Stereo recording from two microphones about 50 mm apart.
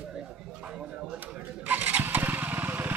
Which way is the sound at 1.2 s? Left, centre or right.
Right.